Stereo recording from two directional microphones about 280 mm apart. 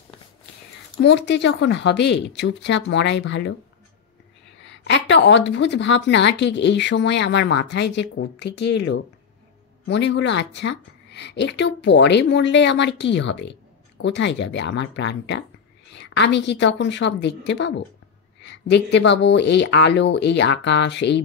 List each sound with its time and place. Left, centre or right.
1.0 s a woman's voice: left
4.6 s a woman's voice: left